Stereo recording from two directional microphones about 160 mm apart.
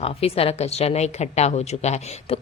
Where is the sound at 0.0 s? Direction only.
40° left (ahead or behind).